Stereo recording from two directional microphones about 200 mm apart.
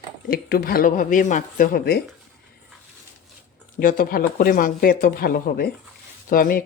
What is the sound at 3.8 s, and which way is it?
Speech, 45° left (ahead or behind).